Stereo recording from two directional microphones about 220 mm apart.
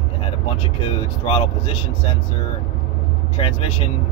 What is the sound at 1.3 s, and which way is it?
Speech, 25° left (ahead or behind).